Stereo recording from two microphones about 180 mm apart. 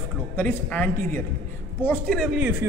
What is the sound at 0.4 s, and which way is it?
A woman's voice, 10° left (ahead or behind).